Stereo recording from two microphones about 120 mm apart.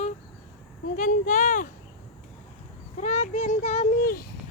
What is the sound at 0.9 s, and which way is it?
Speech, 90° left.